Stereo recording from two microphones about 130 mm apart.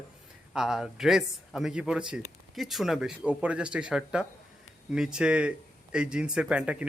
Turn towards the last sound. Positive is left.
turn(degrees=-10)  # may be behind; listen again after turning